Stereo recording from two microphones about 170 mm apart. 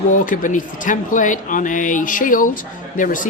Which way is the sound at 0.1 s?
50° left (ahead or behind).